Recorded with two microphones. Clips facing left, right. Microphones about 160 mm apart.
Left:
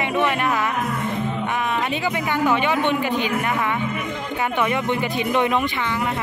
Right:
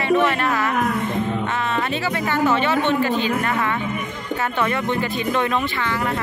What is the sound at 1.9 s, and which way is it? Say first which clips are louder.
A woman's voice: even; 15° left (ahead or behind).